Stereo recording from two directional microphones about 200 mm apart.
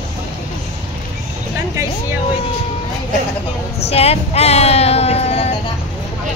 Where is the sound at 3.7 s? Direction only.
30° left (ahead or behind).